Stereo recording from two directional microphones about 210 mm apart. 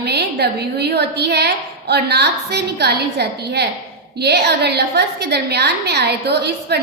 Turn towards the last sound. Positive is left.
turn(degrees=-50)  # may be behind; listen again after turning